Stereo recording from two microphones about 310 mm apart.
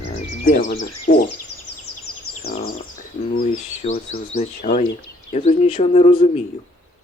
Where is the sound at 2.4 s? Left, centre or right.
Left.